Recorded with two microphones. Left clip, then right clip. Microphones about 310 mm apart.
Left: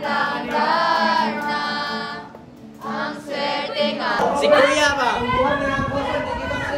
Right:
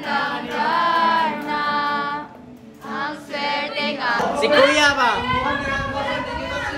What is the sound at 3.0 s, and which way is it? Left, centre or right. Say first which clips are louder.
Child singing: even; centre.